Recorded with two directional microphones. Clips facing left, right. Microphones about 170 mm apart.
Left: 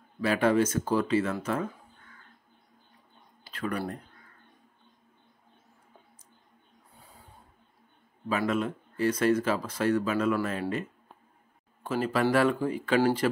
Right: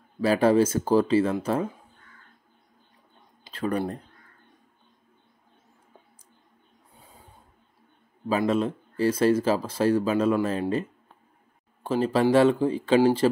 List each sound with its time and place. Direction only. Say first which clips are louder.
0.2 s speech: right 4 dB; 35° right (ahead or behind)
3.4 s speech: right 5 dB; 25° right (ahead or behind)
8.3 s speech: right 4 dB; 30° right (ahead or behind)
11.9 s speech: right 5 dB; 30° right (ahead or behind)